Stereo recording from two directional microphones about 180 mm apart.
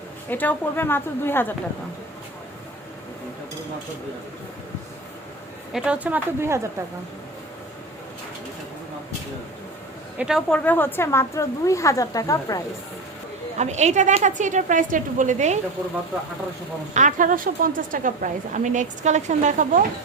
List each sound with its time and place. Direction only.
0.3 s speech: 10° left (ahead or behind)
5.7 s speech: 5° right (ahead or behind)
10.2 s a woman's voice: centre (ahead or behind)
10.6 s speech: 10° left (ahead or behind)
13.6 s a woman's voice: 40° right (ahead or behind)
16.9 s a woman's voice: 45° right (ahead or behind)